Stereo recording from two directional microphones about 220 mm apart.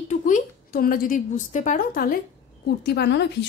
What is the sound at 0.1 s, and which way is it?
A woman's voice, 35° left (ahead or behind).